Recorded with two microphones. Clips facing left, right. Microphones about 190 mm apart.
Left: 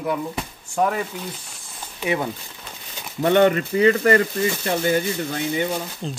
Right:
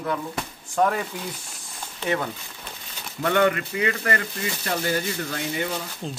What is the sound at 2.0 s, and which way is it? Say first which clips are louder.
Speech: left 2 dB; 15° left (ahead or behind).